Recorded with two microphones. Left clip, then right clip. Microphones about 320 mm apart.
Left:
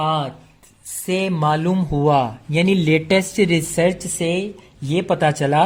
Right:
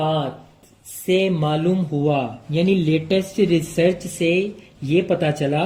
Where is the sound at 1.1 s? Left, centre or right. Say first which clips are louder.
Right 3 dB; left.